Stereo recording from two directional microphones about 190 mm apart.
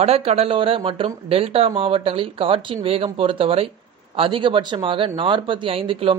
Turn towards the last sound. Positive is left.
turn(degrees=-30)  # may be behind; listen again after turning